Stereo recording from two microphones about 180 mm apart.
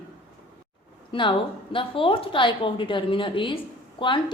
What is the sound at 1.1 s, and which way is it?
A woman's voice, 30° left (ahead or behind).